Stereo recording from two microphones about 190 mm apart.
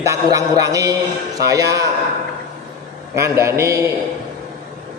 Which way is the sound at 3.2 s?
15° right (ahead or behind).